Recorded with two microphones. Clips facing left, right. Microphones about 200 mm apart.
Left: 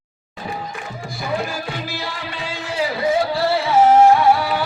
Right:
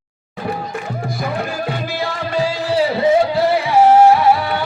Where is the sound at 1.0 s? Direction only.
60° right (ahead or behind); by 3.6 s 20° right (ahead or behind).